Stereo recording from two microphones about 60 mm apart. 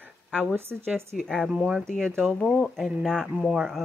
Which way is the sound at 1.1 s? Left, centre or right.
Centre.